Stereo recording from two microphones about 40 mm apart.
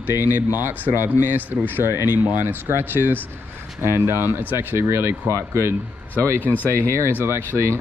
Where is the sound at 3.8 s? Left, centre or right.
Right.